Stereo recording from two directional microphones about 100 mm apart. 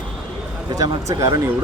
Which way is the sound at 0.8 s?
30° right (ahead or behind).